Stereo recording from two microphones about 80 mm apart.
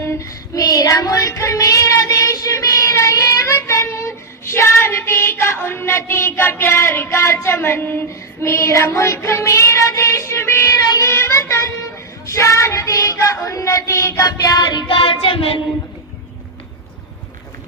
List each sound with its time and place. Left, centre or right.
0.0 s child singing: left
10.8 s child singing: left
11.1 s child singing: left
12.2 s a sound: left